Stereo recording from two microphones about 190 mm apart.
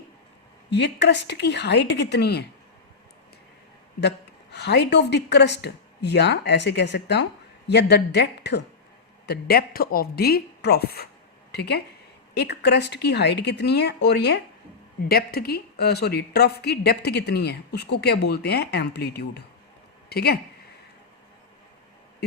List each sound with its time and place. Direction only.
0.7 s speech: 65° left (ahead or behind)
4.5 s speech: 65° left (ahead or behind)